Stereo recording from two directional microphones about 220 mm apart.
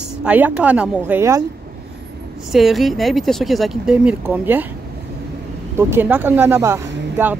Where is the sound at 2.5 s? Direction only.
Centre (ahead or behind).